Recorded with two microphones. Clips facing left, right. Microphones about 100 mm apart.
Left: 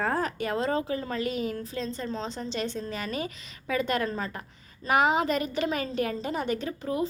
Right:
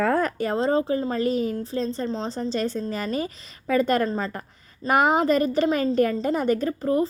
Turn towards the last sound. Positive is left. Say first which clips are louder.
# right 7 dB
turn(degrees=-45)  # may be behind; listen again after turning